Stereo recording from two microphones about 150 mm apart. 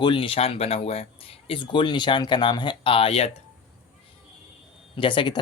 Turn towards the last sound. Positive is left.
turn(degrees=30)  # may be behind; listen again after turning